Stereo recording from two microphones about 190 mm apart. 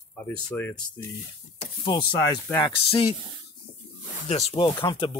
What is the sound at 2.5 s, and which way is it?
Speech, 25° left (ahead or behind).